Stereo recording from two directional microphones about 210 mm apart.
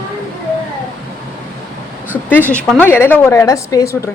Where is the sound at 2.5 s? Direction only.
5° left (ahead or behind).